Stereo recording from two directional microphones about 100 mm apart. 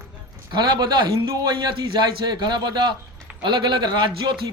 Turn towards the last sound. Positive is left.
turn(degrees=-50)  # may be behind; listen again after turning